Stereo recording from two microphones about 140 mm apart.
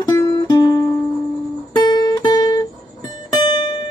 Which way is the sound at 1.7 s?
30° left (ahead or behind).